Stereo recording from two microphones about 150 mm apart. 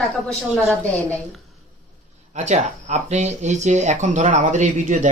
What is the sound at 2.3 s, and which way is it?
Speech, 50° right (ahead or behind).